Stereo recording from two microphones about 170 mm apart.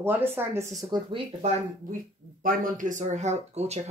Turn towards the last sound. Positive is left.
turn(degrees=-40)  # may be behind; listen again after turning